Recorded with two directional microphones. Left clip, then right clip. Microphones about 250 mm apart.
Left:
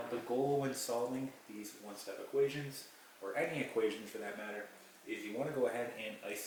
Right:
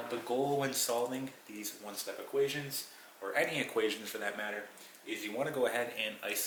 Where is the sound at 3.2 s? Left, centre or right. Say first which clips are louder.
Right 5 dB; centre.